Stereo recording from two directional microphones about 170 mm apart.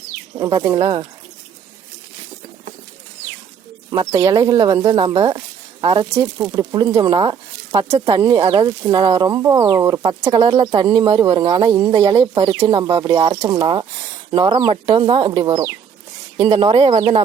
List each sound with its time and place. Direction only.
0.3 s speech: 20° right (ahead or behind)
3.8 s speech: 25° right (ahead or behind)
6.1 s speech: 5° right (ahead or behind)
6.5 s speech: 25° right (ahead or behind)